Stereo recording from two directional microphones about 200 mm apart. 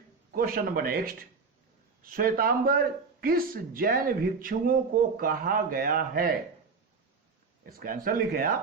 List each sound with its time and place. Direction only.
0.3 s a man's voice: 45° right (ahead or behind)
7.8 s a man's voice: 45° right (ahead or behind)